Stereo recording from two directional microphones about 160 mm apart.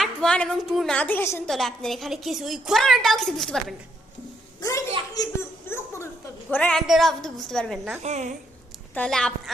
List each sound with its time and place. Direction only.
0.0 s a woman's voice: 5° left (ahead or behind)
1.5 s a woman's voice: centre (ahead or behind)
4.6 s a sound: 20° left (ahead or behind)
6.5 s a woman's voice: 5° left (ahead or behind)
8.0 s a woman's voice: 45° right (ahead or behind)
9.0 s a woman's voice: 5° left (ahead or behind)